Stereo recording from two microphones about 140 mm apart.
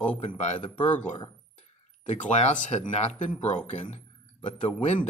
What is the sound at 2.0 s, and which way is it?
A man's voice, 60° left (ahead or behind).